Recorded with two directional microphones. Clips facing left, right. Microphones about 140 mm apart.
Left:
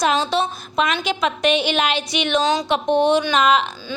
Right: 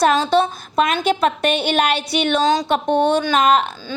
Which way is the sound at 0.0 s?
50° right (ahead or behind).